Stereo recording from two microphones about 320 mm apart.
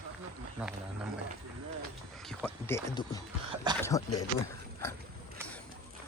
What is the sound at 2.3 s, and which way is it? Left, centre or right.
Speech, centre.